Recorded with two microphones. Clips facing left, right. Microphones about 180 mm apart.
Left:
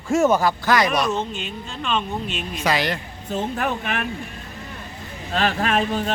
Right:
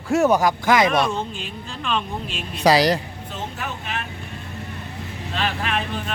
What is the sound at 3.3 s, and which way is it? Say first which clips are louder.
Speech: left 8 dB; 55° left (ahead or behind).